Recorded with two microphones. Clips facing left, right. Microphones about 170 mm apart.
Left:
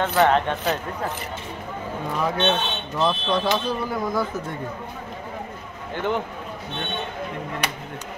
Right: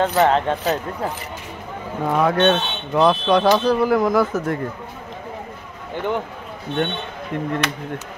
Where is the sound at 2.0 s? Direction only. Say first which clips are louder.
Right 7 dB; 70° right (ahead or behind); by 4.6 s 85° right.